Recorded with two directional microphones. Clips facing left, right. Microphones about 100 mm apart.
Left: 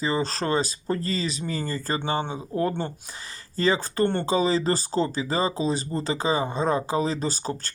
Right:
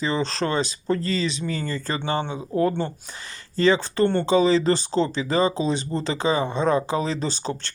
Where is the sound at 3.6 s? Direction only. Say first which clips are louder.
Right 3 dB; 40° left (ahead or behind).